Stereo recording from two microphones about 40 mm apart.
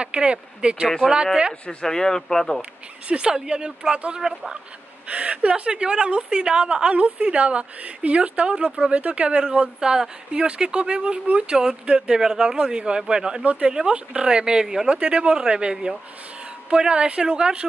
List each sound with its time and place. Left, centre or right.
0.0 s a man's voice: right
1.0 s speech: centre
1.7 s speech: centre
3.1 s a man's voice: right
4.2 s speech: centre
5.0 s a man's voice: right
9.4 s a man's voice: right
11.5 s a man's voice: centre
13.4 s speech: right
14.1 s a man's voice: right
15.0 s a man's voice: right